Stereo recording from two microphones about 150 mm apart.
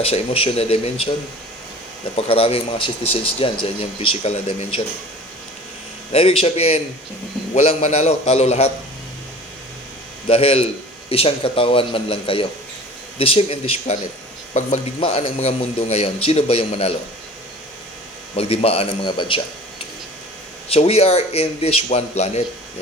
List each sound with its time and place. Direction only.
0.0 s a man's voice: 40° left (ahead or behind)
2.1 s a man's voice: 40° left (ahead or behind)
6.1 s a man's voice: 40° left (ahead or behind)
10.2 s a man's voice: 40° left (ahead or behind)
18.3 s a man's voice: 40° left (ahead or behind)
20.7 s a man's voice: 40° left (ahead or behind)